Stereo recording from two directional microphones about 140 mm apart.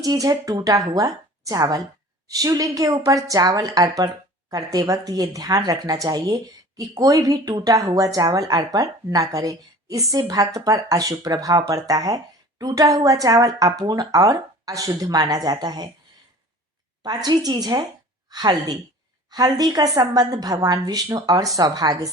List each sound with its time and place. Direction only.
0.0 s speech: 25° right (ahead or behind)
17.0 s speech: 30° right (ahead or behind)